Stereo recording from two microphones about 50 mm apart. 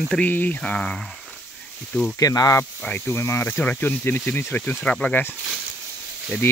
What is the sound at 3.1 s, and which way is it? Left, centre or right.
Speech, left.